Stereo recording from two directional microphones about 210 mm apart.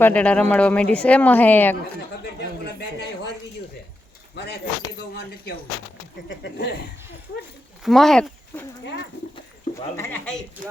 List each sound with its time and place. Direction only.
0.0 s speech: 5° left (ahead or behind)
6.2 s speech: 55° left (ahead or behind)
7.8 s speech: centre (ahead or behind)
9.3 s a sound: 15° left (ahead or behind)